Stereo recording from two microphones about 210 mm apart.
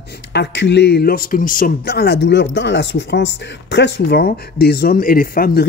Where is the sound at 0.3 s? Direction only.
55° left (ahead or behind).